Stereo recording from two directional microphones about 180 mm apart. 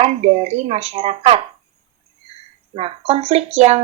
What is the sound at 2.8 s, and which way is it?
Speech, 30° right (ahead or behind).